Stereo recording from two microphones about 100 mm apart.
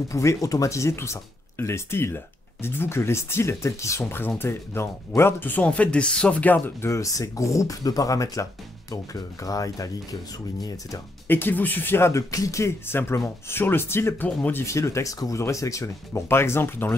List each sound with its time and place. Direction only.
0.1 s speech: 30° left (ahead or behind)
11.2 s speech: 20° left (ahead or behind)